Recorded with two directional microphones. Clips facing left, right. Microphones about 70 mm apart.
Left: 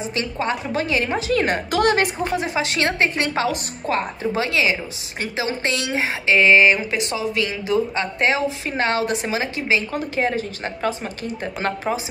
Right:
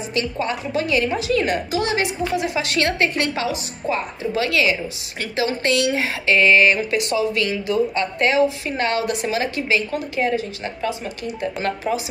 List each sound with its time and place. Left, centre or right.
0.1 s speech: left
1.7 s speech: left
3.4 s speech: left
4.4 s speech: left
9.8 s speech: left